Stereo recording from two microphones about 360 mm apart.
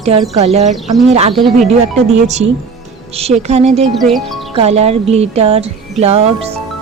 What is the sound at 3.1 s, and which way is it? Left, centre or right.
Music, centre.